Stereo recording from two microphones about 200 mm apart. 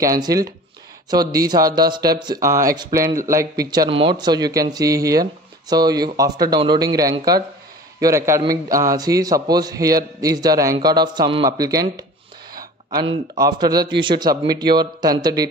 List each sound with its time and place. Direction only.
0.0 s a man's voice: 15° right (ahead or behind)
13.4 s speech: 20° right (ahead or behind)